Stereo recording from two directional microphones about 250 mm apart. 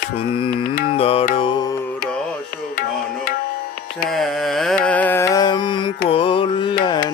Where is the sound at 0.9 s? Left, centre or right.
Left.